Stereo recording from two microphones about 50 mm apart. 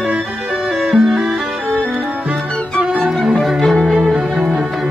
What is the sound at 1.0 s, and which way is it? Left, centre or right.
Music, centre.